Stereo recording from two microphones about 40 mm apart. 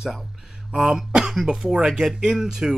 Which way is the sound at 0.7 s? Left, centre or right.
Centre.